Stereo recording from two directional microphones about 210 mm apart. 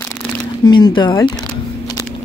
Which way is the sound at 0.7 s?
20° left (ahead or behind).